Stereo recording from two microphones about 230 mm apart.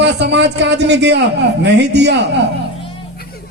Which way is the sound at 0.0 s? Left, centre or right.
Right.